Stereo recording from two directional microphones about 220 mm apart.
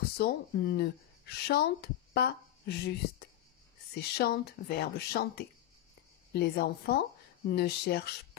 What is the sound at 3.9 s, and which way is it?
Speech, 45° left (ahead or behind).